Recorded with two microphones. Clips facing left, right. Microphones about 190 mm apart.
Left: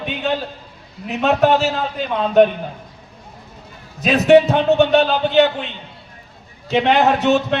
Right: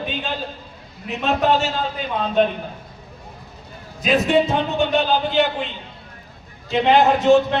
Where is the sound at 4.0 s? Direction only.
70° left (ahead or behind).